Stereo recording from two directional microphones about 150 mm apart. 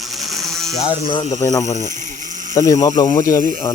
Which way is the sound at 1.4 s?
20° left (ahead or behind).